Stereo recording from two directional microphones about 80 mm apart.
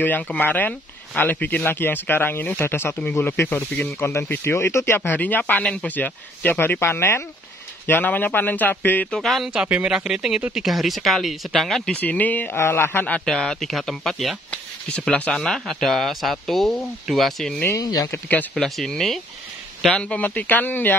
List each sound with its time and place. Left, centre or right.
0.0 s a man's voice: left
9.1 s speech: centre
9.5 s speech: centre
11.9 s a man's voice: centre
13.0 s speech: centre
14.5 s speech: centre
17.8 s speech: left
18.6 s speech: centre
19.9 s speech: centre